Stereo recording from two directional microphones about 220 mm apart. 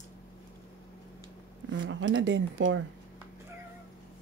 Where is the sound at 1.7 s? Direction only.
55° right (ahead or behind).